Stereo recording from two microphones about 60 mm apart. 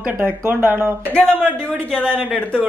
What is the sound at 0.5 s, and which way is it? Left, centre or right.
Speech, right.